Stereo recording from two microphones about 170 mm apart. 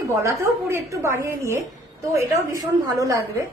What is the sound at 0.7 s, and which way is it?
A woman's voice, 15° right (ahead or behind).